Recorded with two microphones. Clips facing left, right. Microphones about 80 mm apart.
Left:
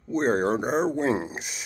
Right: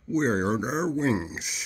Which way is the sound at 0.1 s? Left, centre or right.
Left.